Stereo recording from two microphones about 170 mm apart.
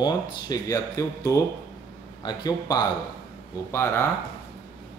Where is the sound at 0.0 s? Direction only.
20° left (ahead or behind).